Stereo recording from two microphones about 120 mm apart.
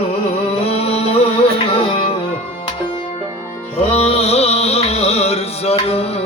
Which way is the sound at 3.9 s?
60° left (ahead or behind).